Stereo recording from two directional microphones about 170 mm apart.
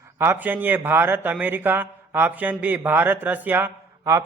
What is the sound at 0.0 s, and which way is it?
Speech, 15° right (ahead or behind).